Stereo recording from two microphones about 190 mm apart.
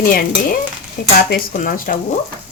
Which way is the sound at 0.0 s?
50° left (ahead or behind).